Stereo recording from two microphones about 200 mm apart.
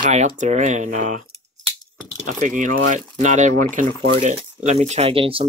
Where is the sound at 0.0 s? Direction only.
35° right (ahead or behind).